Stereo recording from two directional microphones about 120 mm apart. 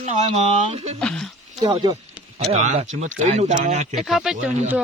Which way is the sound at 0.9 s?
5° left (ahead or behind).